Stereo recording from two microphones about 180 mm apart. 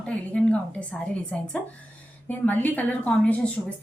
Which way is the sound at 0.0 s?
5° left (ahead or behind).